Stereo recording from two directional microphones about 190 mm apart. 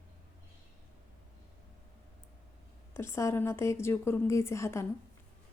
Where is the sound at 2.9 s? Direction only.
15° left (ahead or behind).